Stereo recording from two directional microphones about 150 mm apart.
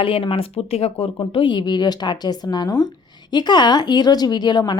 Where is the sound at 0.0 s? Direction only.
35° left (ahead or behind).